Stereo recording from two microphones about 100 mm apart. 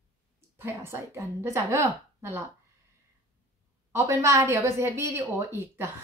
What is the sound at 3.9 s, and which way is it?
A woman's voice, 30° right (ahead or behind).